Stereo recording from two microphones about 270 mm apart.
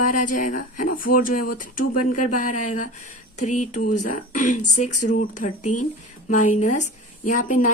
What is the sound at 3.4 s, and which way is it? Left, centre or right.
Speech, left.